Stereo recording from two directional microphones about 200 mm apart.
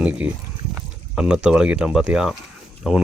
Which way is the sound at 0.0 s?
5° right (ahead or behind).